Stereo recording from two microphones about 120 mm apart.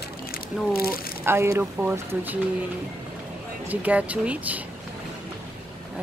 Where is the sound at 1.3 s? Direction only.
20° right (ahead or behind).